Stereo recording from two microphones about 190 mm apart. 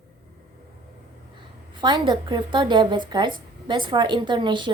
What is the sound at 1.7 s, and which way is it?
A woman's voice, 25° right (ahead or behind).